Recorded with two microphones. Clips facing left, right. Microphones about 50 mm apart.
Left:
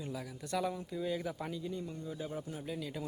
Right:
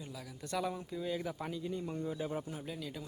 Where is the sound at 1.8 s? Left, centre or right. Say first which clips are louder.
Right 4 dB; right.